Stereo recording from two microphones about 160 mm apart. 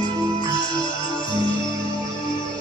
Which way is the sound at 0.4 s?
30° left (ahead or behind).